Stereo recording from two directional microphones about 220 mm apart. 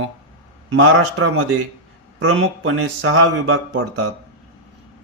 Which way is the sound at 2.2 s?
65° right (ahead or behind).